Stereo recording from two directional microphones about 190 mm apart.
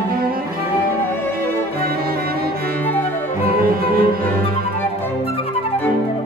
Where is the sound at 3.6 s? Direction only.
50° right (ahead or behind).